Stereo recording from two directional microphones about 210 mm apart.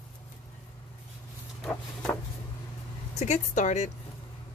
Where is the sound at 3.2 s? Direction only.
35° left (ahead or behind).